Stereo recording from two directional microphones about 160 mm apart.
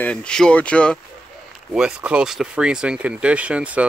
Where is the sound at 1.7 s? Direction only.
5° right (ahead or behind).